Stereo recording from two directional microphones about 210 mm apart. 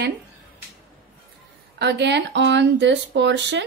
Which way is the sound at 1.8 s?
55° right (ahead or behind).